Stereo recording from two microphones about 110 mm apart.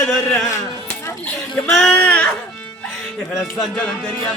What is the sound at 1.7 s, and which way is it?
Speech, 5° left (ahead or behind).